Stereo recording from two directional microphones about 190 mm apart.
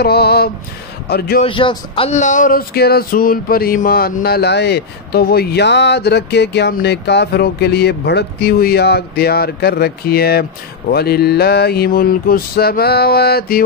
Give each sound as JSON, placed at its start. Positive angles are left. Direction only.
{"t": 0.0, "sound": "speech", "side_deg": 55}
{"t": 1.4, "sound": "speech", "side_deg": 25}